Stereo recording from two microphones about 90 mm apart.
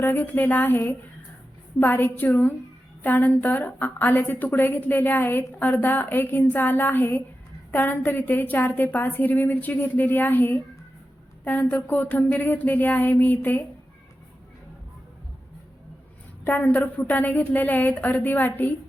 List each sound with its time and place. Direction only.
0.0 s a woman's voice: 25° left (ahead or behind)
16.4 s a woman's voice: 20° left (ahead or behind)